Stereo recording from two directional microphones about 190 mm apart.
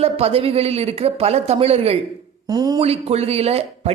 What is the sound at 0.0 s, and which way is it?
Speech, 30° right (ahead or behind).